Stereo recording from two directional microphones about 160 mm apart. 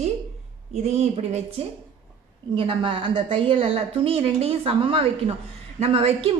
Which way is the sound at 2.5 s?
30° right (ahead or behind).